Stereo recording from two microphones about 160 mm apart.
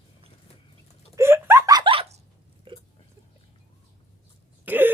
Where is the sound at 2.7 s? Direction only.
30° right (ahead or behind).